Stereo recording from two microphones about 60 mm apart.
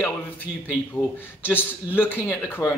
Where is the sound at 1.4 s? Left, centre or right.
Left.